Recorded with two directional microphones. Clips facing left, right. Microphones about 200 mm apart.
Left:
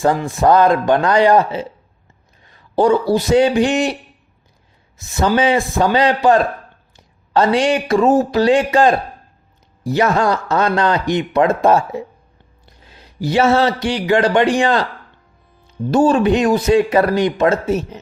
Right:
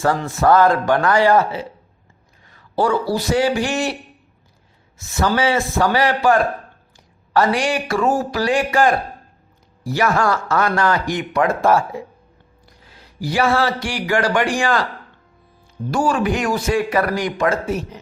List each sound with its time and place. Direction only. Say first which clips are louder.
0.0 s a man's voice: left 3 dB; 15° left (ahead or behind)
4.9 s speech: left 3 dB; 20° left (ahead or behind)
15.9 s speech: left 6 dB; 25° left (ahead or behind)